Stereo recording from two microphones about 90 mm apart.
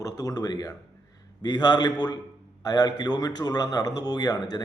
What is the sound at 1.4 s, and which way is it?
A man's voice, 55° left (ahead or behind).